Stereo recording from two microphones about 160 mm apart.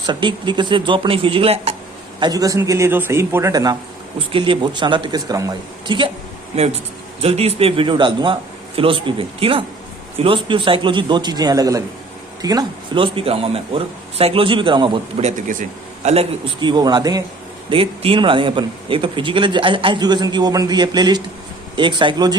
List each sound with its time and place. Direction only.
0.0 s speech: 30° right (ahead or behind)
2.2 s a man's voice: 25° right (ahead or behind)
7.2 s a man's voice: 40° right (ahead or behind)
15.2 s speech: 55° right (ahead or behind)
16.0 s a man's voice: 35° right (ahead or behind)
17.7 s a man's voice: 35° right (ahead or behind)